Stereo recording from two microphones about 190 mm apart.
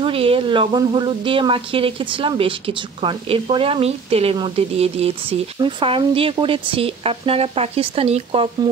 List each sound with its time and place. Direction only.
0.0 s speech: 30° right (ahead or behind)